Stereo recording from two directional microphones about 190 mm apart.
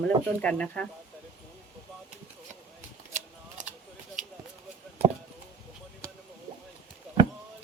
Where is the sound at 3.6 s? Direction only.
40° right (ahead or behind).